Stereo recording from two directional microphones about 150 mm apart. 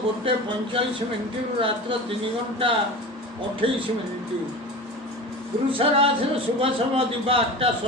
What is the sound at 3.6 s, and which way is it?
Speech, 35° right (ahead or behind).